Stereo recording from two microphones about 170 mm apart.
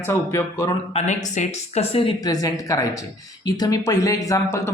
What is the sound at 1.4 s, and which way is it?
Speech, 40° left (ahead or behind).